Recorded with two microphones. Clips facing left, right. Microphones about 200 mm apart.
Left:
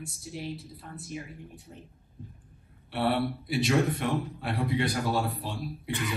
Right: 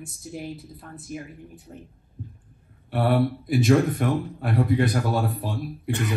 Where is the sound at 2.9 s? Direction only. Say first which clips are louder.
Right 5 dB; 50° right (ahead or behind).